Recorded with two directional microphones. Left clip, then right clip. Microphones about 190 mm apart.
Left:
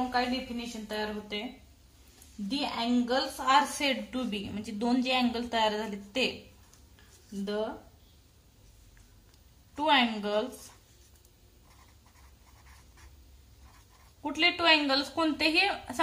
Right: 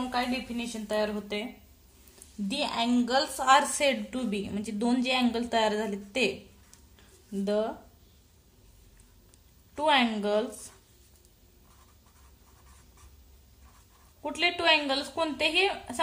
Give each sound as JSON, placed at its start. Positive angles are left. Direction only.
{"t": 0.1, "sound": "a woman's voice", "side_deg": -35}
{"t": 2.5, "sound": "a woman's voice", "side_deg": -40}
{"t": 7.4, "sound": "a woman's voice", "side_deg": -35}
{"t": 9.8, "sound": "a woman's voice", "side_deg": -25}
{"t": 14.2, "sound": "a woman's voice", "side_deg": -15}